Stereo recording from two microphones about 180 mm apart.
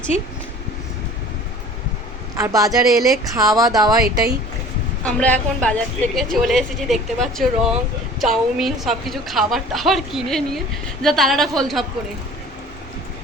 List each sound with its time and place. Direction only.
2.3 s speech: 20° right (ahead or behind)
2.9 s a woman's voice: centre (ahead or behind)
3.3 s speech: 20° right (ahead or behind)
5.0 s a woman's voice: 5° left (ahead or behind)